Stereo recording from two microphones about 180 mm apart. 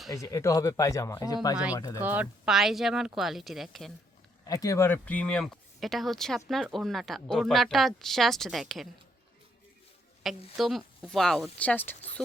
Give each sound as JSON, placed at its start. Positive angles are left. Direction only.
{"t": 0.1, "sound": "speech", "side_deg": 15}
{"t": 2.0, "sound": "a woman's voice", "side_deg": -10}
{"t": 4.4, "sound": "a woman's voice", "side_deg": 20}
{"t": 10.3, "sound": "a woman's voice", "side_deg": 0}